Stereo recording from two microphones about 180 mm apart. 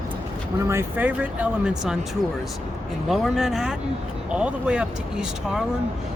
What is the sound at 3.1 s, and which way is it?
Speech, centre (ahead or behind).